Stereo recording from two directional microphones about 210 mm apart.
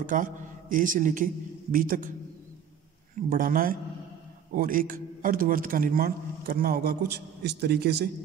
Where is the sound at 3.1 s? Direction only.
40° right (ahead or behind).